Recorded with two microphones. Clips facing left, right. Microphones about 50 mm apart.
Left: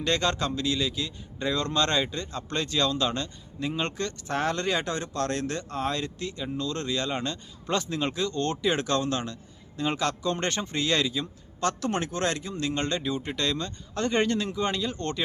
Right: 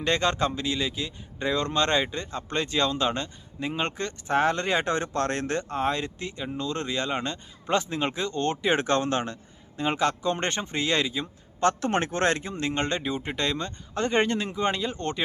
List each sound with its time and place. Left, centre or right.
0.0 s speech: centre
11.7 s speech: right; by 15.2 s centre